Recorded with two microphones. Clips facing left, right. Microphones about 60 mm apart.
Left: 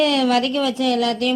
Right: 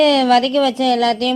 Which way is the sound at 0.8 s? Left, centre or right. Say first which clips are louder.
Right 4 dB; right.